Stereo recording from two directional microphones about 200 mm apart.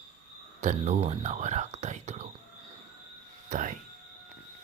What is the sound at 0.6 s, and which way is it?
Speech, 35° right (ahead or behind).